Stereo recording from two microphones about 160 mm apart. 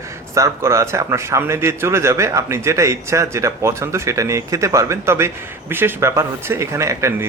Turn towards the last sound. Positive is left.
turn(degrees=-15)  # may be behind; listen again after turning